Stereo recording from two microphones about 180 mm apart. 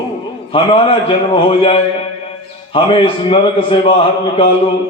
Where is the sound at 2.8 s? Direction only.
30° left (ahead or behind).